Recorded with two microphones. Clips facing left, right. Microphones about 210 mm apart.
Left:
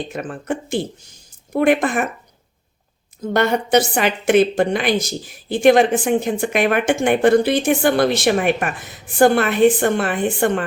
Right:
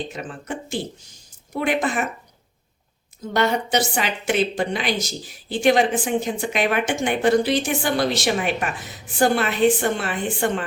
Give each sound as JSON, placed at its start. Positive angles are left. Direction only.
{"t": 0.1, "sound": "a woman's voice", "side_deg": 55}
{"t": 3.3, "sound": "a woman's voice", "side_deg": 55}